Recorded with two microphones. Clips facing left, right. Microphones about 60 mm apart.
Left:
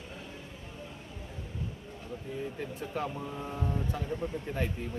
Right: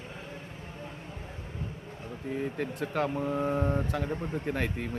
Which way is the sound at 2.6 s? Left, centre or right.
Right.